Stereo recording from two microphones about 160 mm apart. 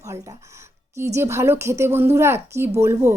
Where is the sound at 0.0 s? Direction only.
20° right (ahead or behind).